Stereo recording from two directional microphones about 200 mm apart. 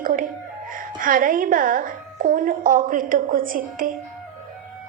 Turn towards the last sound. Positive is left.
turn(degrees=-45)  # may be behind; listen again after turning